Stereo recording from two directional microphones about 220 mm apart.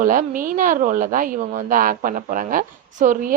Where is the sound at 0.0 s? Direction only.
40° right (ahead or behind).